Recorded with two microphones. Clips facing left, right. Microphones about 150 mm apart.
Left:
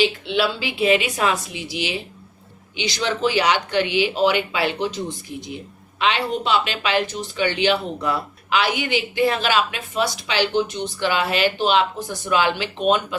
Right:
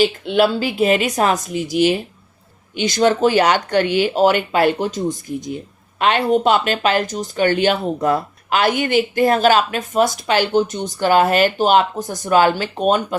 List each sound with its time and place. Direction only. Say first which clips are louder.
0.0 s a woman's voice: right 5 dB; 45° right (ahead or behind)